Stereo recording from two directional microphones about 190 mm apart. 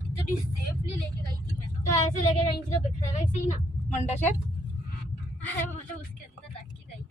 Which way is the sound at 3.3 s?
40° left (ahead or behind).